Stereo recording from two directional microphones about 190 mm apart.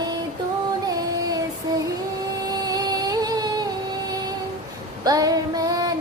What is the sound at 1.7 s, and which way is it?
Female singing, 20° right (ahead or behind).